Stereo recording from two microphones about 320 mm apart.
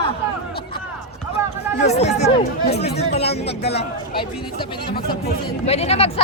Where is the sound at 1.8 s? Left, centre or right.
Centre.